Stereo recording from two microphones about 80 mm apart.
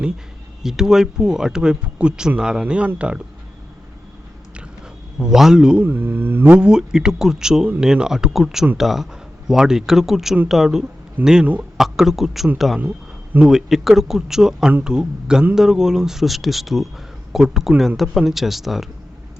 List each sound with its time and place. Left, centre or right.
0.6 s speech: centre
5.2 s speech: centre
5.8 s speech: right; by 18.9 s centre